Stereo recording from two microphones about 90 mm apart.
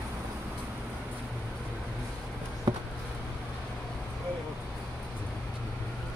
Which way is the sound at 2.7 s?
50° right (ahead or behind).